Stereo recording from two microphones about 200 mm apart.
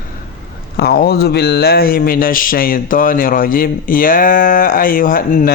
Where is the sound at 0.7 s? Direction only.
50° left (ahead or behind).